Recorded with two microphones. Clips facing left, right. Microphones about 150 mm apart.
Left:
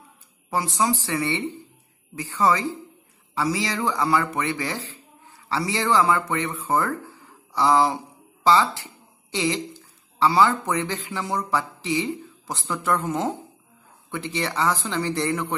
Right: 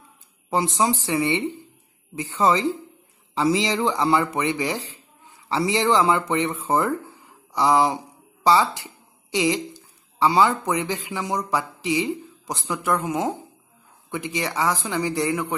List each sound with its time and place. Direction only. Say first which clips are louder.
0.5 s a woman's voice: right 2 dB; 20° right (ahead or behind)